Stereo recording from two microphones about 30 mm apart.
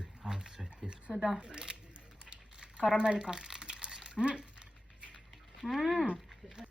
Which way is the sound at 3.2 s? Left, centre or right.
Right.